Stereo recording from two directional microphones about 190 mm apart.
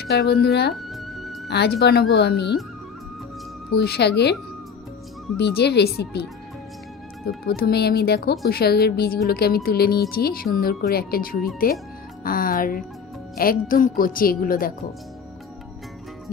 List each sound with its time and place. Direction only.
0.0 s speech: 55° left (ahead or behind)
0.7 s music: centre (ahead or behind)
1.5 s speech: 60° left (ahead or behind)
3.7 s speech: 60° left (ahead or behind)
5.4 s speech: 60° left (ahead or behind)
7.4 s a woman's voice: 55° left (ahead or behind)